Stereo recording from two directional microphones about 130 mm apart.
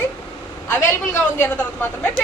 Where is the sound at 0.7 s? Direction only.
15° left (ahead or behind).